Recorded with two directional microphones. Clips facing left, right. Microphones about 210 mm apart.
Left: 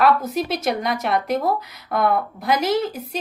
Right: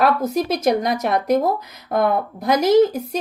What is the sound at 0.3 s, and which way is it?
A woman's voice, 40° right (ahead or behind).